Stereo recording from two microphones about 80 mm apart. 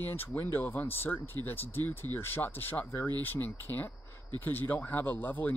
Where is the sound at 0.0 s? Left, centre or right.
Left.